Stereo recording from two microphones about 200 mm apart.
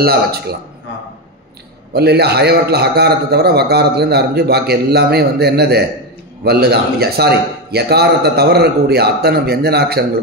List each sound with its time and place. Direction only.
0.0 s a man's voice: 50° right (ahead or behind)
2.0 s a man's voice: 55° right (ahead or behind)